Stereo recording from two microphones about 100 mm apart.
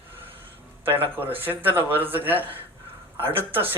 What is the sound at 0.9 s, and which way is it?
Speech, 20° right (ahead or behind).